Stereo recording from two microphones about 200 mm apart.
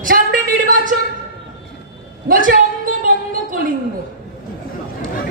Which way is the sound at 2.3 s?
45° right (ahead or behind).